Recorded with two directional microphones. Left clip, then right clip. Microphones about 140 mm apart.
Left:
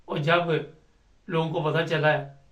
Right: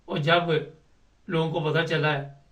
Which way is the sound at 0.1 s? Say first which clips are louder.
Right 1 dB; 5° left (ahead or behind).